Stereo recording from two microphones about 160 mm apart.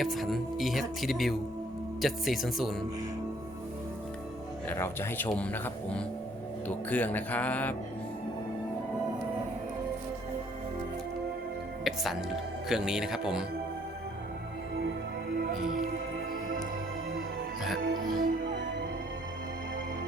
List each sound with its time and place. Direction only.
0.0 s speech: centre (ahead or behind)
4.7 s speech: 15° left (ahead or behind)
11.9 s speech: centre (ahead or behind)
15.3 s music: 75° right (ahead or behind)
17.8 s music: 75° right (ahead or behind)